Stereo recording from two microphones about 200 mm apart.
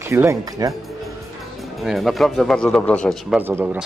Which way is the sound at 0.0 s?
15° right (ahead or behind).